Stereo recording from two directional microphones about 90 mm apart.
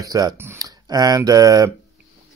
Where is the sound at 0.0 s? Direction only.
45° right (ahead or behind).